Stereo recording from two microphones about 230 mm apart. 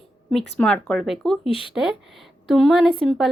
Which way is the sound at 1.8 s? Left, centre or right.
Centre.